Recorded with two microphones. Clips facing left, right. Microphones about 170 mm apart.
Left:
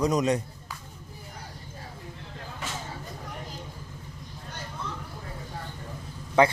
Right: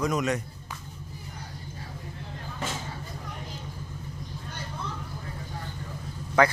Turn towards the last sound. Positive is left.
turn(degrees=30)  # may be behind; listen again after turning